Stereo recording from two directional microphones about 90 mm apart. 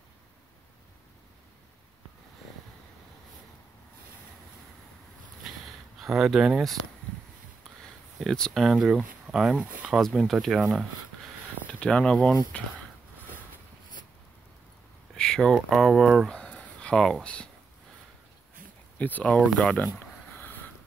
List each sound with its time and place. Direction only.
5.4 s a sound: 5° right (ahead or behind)
5.9 s speech: centre (ahead or behind)
8.2 s speech: 5° left (ahead or behind)
11.8 s speech: 10° left (ahead or behind)
15.1 s speech: 5° left (ahead or behind)
18.9 s speech: 15° left (ahead or behind)
20.2 s a sound: 20° left (ahead or behind)